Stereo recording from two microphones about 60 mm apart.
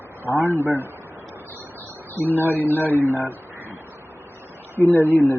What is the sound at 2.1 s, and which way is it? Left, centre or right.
Speech, left.